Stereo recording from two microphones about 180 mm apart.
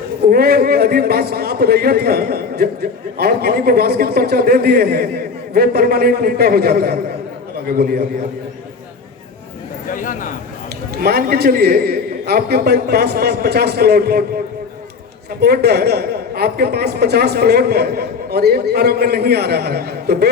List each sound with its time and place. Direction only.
0.3 s a man's voice: 60° right (ahead or behind)
9.9 s a sound: 50° left (ahead or behind)
10.9 s a man's voice: 60° right (ahead or behind)